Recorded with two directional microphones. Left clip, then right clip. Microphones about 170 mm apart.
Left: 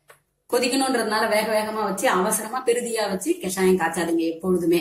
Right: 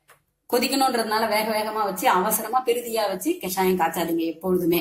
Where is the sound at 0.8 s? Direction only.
50° right (ahead or behind).